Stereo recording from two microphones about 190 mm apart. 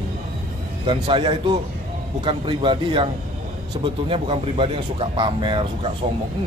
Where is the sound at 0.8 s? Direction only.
30° right (ahead or behind).